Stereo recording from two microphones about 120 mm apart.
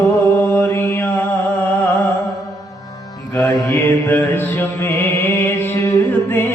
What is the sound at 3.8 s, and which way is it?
Mantra, 15° left (ahead or behind).